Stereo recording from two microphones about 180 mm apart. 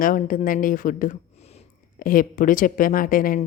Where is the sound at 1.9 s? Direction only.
50° left (ahead or behind).